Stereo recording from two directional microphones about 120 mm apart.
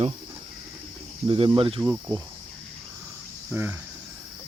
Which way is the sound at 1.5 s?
50° right (ahead or behind).